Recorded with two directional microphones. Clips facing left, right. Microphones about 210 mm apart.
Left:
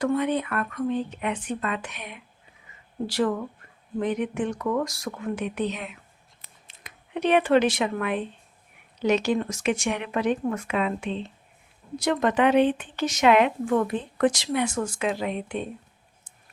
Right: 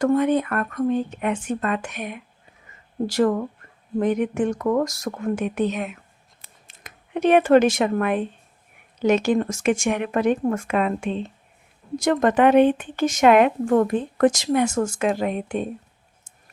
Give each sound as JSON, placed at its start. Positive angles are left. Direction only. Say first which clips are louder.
{"t": 0.0, "sound": "a woman's voice", "louder": "right 5 dB", "side_deg": -45}